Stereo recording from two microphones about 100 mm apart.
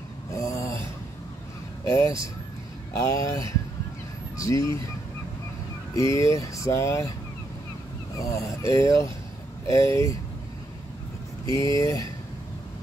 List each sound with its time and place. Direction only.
0.3 s a sound: 30° left (ahead or behind)
1.9 s speech: 30° left (ahead or behind)
5.9 s speech: 30° left (ahead or behind)
8.2 s speech: 35° left (ahead or behind)
11.4 s speech: 30° left (ahead or behind)